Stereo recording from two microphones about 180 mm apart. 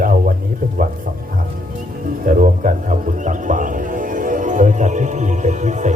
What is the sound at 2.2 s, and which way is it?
Music, 45° right (ahead or behind).